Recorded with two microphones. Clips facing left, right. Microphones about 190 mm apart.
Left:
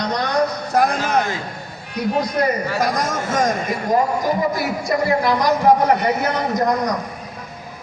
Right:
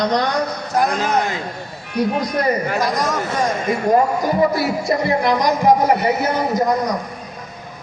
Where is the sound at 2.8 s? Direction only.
50° left (ahead or behind).